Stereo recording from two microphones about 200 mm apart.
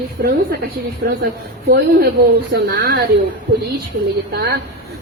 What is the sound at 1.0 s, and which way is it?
Speech, 55° right (ahead or behind).